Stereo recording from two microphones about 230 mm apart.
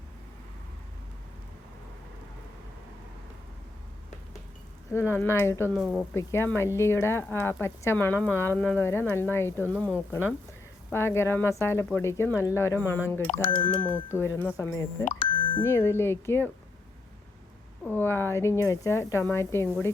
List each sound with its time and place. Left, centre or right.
4.9 s speech: centre
13.3 s speech: left
13.8 s speech: centre
17.8 s speech: centre